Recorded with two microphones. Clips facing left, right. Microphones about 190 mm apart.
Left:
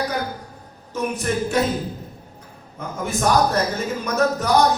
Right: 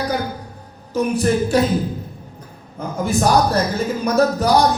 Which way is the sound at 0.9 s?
35° right (ahead or behind).